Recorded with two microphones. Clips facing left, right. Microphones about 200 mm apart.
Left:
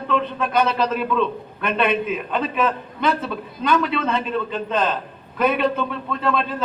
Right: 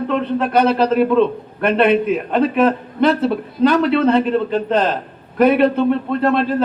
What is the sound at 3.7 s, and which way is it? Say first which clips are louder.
A man's voice: right 4 dB; 35° right (ahead or behind).